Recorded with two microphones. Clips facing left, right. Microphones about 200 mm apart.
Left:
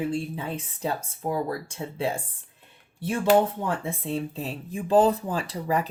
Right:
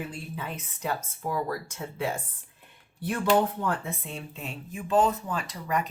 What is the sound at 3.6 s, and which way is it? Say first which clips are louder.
Speech: left 2 dB; 30° left (ahead or behind).